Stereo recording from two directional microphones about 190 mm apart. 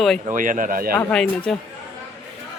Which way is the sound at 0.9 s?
5° left (ahead or behind).